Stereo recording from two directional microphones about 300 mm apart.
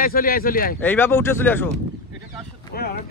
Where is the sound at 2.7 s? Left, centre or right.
Left.